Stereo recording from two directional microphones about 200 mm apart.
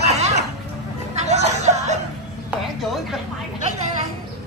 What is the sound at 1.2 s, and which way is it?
Music, 35° right (ahead or behind).